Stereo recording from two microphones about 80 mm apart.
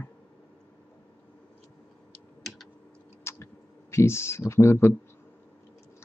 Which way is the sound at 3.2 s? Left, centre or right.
Left.